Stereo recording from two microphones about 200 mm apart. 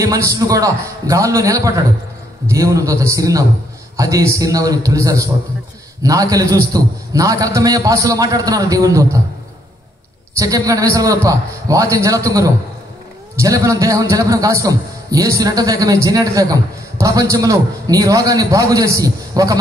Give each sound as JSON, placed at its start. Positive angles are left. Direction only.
{"t": 0.0, "sound": "a man's voice", "side_deg": -15}
{"t": 10.4, "sound": "a man's voice", "side_deg": -15}